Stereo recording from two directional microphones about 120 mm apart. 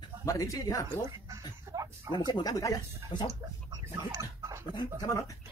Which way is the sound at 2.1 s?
35° left (ahead or behind).